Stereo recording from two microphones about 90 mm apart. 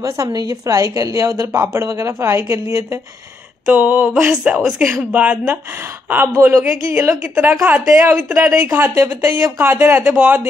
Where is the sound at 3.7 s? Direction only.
15° right (ahead or behind).